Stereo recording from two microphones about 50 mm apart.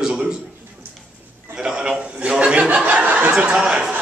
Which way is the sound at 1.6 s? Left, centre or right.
Centre.